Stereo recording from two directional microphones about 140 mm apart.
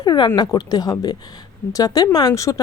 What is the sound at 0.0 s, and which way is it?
Speech, 30° left (ahead or behind).